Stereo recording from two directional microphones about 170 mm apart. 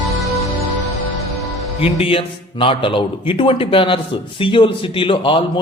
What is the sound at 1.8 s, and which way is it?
A man's voice, 35° left (ahead or behind).